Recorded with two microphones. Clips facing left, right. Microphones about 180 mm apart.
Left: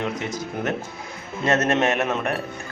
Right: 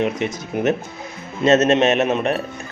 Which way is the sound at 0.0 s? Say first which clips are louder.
Right 5 dB; 20° right (ahead or behind).